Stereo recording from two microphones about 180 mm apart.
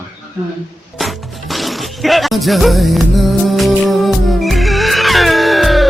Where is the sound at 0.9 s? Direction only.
Centre (ahead or behind).